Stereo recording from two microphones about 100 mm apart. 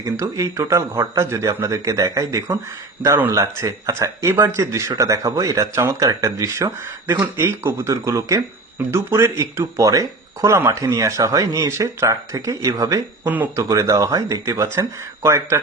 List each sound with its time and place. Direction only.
0.0 s speech: 30° right (ahead or behind)
13.2 s speech: 20° right (ahead or behind)
13.6 s speech: 30° right (ahead or behind)